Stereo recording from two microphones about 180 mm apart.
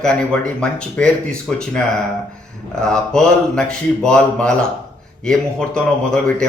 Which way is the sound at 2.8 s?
5° left (ahead or behind).